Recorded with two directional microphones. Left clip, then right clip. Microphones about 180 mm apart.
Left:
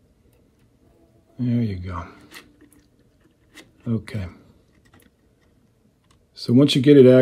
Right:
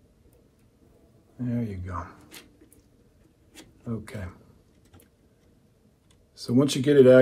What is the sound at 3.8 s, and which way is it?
Speech, 45° left (ahead or behind).